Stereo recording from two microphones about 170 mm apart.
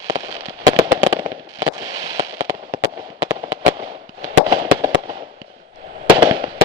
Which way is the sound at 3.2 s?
25° right (ahead or behind).